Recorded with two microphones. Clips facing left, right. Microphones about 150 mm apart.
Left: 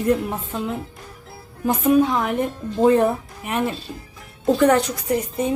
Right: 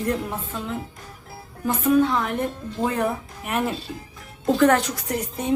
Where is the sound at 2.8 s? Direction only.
25° left (ahead or behind).